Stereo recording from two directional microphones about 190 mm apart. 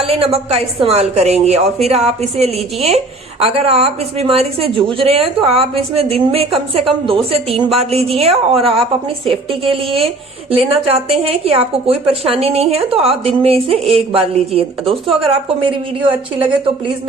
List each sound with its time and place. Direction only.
0.0 s a woman's voice: 30° right (ahead or behind)